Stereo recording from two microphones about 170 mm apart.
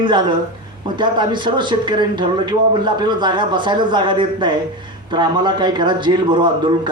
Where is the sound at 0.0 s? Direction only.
30° right (ahead or behind).